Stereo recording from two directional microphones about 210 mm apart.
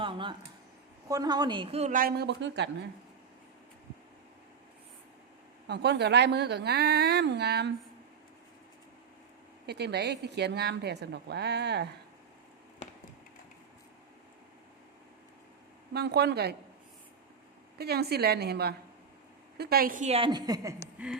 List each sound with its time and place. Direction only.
0.0 s a sound: 25° right (ahead or behind)
1.0 s a woman's voice: 15° right (ahead or behind); by 2.6 s 55° right (ahead or behind)
5.6 s a woman's voice: 55° right (ahead or behind)
9.6 s a woman's voice: 50° right (ahead or behind)
15.9 s a woman's voice: 50° right (ahead or behind)
17.7 s a woman's voice: 50° right (ahead or behind); by 20.7 s 15° right (ahead or behind)
21.0 s a sound: 5° right (ahead or behind)